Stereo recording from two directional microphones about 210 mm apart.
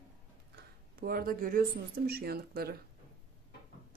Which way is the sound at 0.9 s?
45° right (ahead or behind).